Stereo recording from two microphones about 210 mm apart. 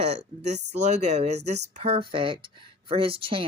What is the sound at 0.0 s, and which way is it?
Speech, 30° right (ahead or behind).